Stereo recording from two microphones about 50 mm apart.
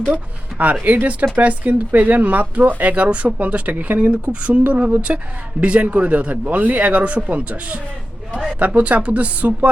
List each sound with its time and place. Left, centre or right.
0.6 s speech: right